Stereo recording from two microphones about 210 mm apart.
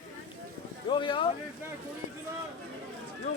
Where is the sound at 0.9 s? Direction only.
20° left (ahead or behind).